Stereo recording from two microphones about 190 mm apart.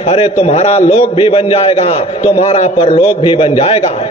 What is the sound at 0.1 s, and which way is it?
A man's voice, 30° left (ahead or behind).